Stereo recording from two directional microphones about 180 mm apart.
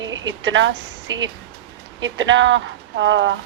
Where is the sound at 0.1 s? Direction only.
90° right.